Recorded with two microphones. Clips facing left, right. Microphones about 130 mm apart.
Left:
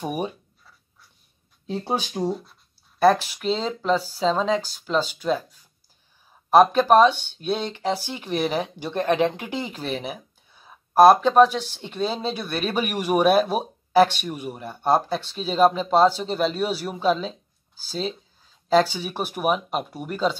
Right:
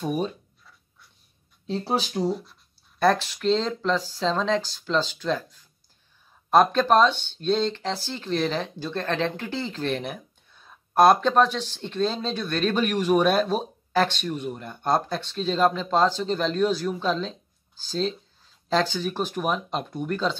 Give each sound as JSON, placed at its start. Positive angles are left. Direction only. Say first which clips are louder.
{"t": 0.0, "sound": "speech", "louder": "right 1 dB", "side_deg": 15}
{"t": 1.7, "sound": "speech", "louder": "even", "side_deg": 15}